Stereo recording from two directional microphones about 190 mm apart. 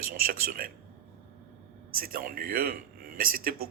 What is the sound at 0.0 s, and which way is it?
Speech, 50° right (ahead or behind).